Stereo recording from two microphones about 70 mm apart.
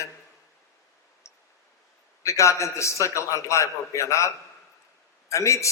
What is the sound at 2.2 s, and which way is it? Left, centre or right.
A man's voice, left.